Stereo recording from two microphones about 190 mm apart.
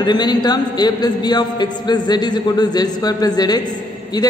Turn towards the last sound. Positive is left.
turn(degrees=20)  # may be behind; listen again after turning